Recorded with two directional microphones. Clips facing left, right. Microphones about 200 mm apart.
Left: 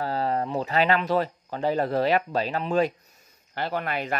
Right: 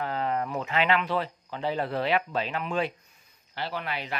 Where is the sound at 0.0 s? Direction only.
35° left (ahead or behind).